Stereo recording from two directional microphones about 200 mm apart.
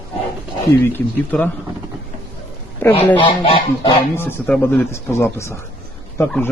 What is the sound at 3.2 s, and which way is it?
Goose, 25° left (ahead or behind).